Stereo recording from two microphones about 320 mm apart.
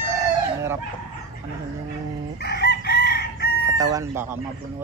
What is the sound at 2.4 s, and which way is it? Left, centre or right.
Chicken, left.